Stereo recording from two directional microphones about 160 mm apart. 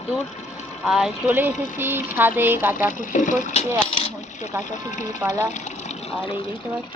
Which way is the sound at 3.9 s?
40° left (ahead or behind).